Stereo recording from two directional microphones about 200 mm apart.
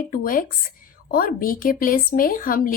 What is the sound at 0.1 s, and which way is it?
Speech, 45° left (ahead or behind).